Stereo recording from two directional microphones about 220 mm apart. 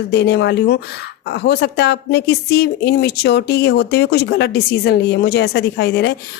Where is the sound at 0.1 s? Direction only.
50° left (ahead or behind).